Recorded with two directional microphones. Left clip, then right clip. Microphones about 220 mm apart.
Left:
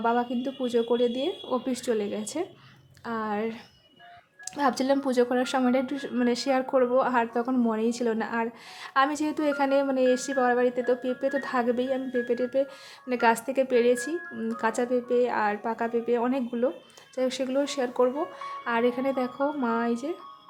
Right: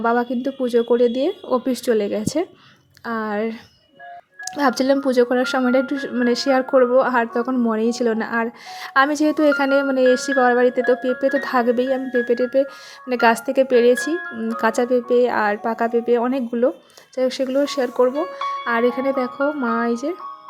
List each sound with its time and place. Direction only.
0.0 s speech: 20° right (ahead or behind)